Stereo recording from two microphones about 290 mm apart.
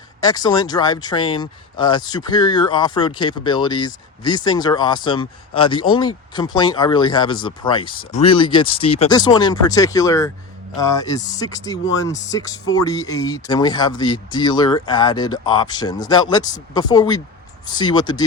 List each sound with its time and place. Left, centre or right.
0.2 s speech: centre